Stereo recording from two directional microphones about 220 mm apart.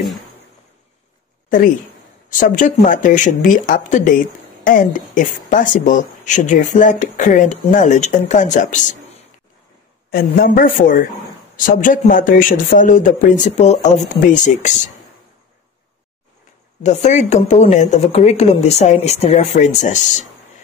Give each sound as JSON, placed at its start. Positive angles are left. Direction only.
{"t": 2.5, "sound": "speech", "side_deg": 35}
{"t": 10.1, "sound": "speech", "side_deg": 40}
{"t": 16.8, "sound": "speech", "side_deg": 30}